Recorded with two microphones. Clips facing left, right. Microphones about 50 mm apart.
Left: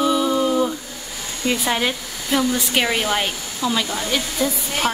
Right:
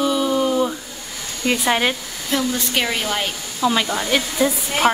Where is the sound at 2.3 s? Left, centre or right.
Centre.